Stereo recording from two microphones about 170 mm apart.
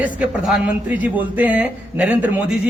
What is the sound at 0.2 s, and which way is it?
A man's voice, 10° right (ahead or behind).